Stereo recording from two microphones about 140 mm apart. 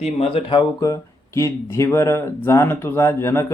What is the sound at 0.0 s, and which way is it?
Speech, 45° left (ahead or behind).